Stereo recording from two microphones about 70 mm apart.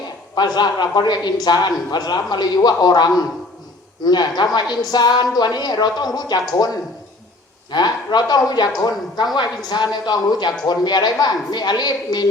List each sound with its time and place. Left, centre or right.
0.3 s a man's voice: left
4.0 s speech: left
7.7 s speech: left
10.7 s speech: left